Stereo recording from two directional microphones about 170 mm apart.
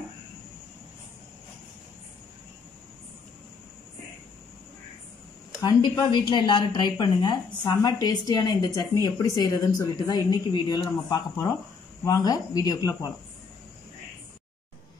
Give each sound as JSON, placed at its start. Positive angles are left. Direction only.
{"t": 5.8, "sound": "a woman's voice", "side_deg": 25}